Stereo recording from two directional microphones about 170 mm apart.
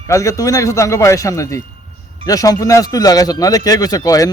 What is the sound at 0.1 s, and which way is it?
A man's voice, 20° left (ahead or behind).